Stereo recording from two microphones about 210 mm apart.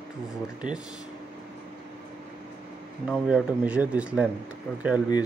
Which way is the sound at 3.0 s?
5° right (ahead or behind).